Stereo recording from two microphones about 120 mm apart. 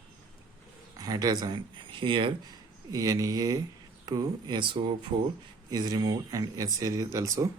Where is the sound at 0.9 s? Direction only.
30° right (ahead or behind).